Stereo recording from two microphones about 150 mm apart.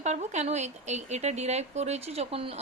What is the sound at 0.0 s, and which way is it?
Speech, 50° right (ahead or behind).